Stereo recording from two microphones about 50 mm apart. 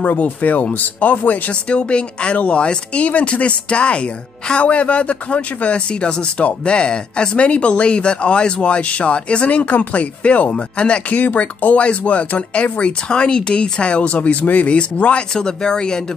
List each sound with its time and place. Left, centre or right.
0.0 s speech: left; by 16.0 s centre